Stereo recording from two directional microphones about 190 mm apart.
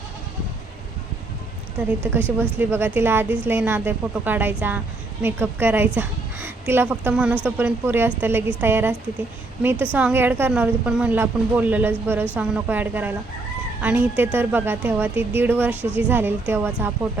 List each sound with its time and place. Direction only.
2.0 s a woman's voice: 10° right (ahead or behind)